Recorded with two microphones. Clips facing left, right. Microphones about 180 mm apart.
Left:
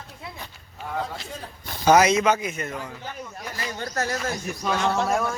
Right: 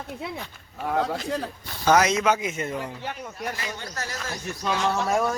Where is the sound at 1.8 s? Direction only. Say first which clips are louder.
Left 3 dB; 10° left (ahead or behind).